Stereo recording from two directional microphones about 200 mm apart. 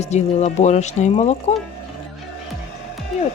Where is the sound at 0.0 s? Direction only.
35° left (ahead or behind).